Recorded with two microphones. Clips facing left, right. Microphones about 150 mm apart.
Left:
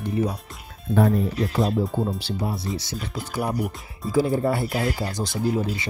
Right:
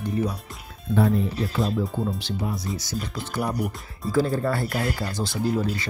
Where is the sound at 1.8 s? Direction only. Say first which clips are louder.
Left 2 dB; centre (ahead or behind).